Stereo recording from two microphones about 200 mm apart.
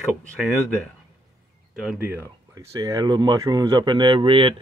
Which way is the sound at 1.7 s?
5° right (ahead or behind).